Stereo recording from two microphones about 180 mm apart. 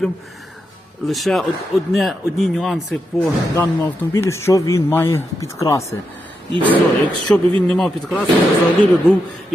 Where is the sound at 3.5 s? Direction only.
15° left (ahead or behind).